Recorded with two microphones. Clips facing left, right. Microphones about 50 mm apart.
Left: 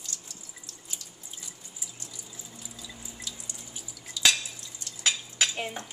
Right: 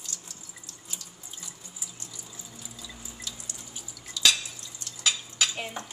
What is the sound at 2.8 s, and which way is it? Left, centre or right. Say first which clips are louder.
Drip: even; centre.